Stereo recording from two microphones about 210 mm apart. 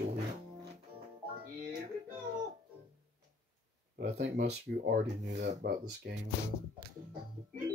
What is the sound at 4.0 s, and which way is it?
Speech, 50° right (ahead or behind).